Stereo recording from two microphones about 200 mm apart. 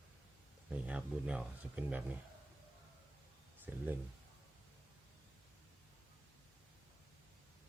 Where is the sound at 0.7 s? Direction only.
5° right (ahead or behind).